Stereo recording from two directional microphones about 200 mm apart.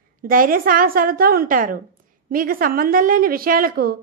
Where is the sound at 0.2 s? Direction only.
45° right (ahead or behind).